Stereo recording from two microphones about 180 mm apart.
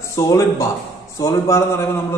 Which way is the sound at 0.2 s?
20° left (ahead or behind).